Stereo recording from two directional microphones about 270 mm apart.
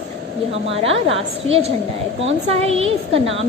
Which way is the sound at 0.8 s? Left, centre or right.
Right.